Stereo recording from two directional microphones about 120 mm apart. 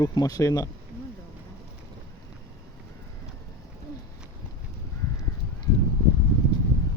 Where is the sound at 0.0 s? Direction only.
30° left (ahead or behind).